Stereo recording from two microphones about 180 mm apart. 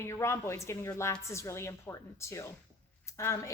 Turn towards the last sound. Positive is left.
turn(degrees=15)  # may be behind; listen again after turning